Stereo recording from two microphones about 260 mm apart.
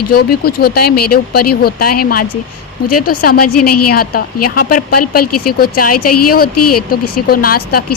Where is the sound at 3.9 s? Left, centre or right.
Left.